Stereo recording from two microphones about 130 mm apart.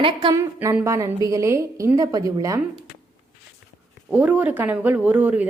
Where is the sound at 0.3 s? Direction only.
25° right (ahead or behind).